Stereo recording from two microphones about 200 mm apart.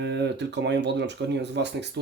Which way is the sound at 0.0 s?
60° right (ahead or behind).